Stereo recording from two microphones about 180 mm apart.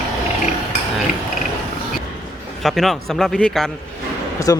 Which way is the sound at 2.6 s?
Centre (ahead or behind).